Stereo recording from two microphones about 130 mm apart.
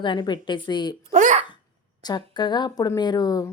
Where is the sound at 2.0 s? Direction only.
35° left (ahead or behind).